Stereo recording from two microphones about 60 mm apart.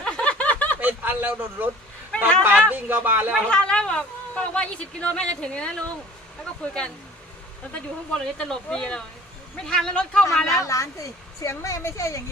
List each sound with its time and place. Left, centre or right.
0.0 s a sound: centre
0.8 s a man's voice: right
2.1 s a man's voice: centre
2.6 s speech: right
3.4 s a woman's voice: centre
8.1 s a woman's voice: centre
10.4 s a woman's voice: left